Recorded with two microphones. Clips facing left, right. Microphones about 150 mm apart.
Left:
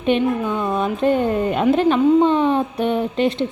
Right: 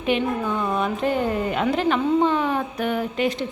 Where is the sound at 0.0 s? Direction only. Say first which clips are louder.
Left 4 dB; 20° left (ahead or behind).